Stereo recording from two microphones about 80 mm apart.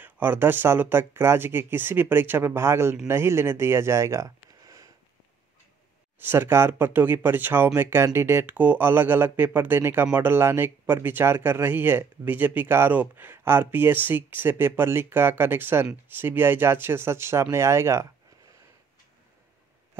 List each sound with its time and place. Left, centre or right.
0.0 s speech: right
6.1 s speech: right